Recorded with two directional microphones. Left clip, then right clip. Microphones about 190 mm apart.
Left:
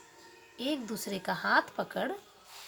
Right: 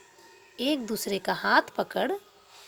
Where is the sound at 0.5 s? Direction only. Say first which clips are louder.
Right 6 dB; 35° right (ahead or behind).